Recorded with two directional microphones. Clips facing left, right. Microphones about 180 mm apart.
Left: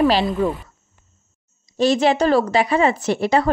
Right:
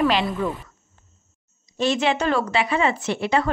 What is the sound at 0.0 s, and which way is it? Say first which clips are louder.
Speech: left 4 dB; 30° left (ahead or behind).